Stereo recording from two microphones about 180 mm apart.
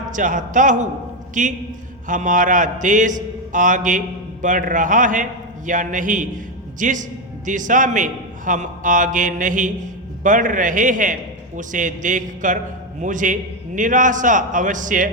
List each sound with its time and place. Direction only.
0.1 s a man's voice: 45° right (ahead or behind)